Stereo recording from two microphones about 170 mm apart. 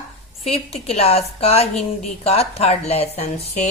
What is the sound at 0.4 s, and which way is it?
Speech, 35° left (ahead or behind).